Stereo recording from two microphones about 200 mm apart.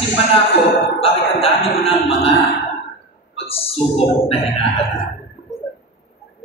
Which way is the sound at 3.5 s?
30° left (ahead or behind).